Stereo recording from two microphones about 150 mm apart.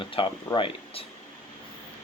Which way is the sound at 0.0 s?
35° left (ahead or behind).